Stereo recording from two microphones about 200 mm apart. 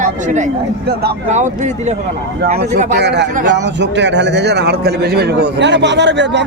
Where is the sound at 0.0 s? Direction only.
40° right (ahead or behind).